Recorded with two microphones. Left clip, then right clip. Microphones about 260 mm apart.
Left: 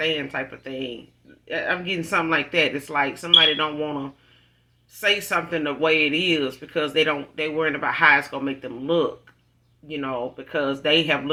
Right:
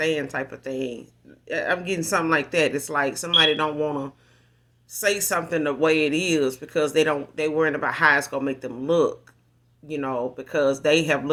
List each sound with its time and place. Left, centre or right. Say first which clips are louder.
0.1 s speech: even; right
4.9 s speech: left 1 dB; right